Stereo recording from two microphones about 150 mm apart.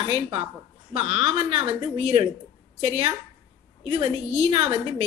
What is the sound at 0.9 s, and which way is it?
Speech, 45° right (ahead or behind).